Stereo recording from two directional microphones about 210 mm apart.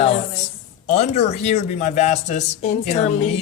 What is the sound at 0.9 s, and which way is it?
Speech, 30° left (ahead or behind).